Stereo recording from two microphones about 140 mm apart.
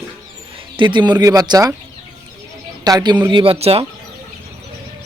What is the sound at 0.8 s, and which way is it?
Speech, 35° right (ahead or behind).